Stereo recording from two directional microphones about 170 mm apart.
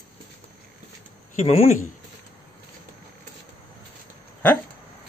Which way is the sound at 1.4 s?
40° left (ahead or behind).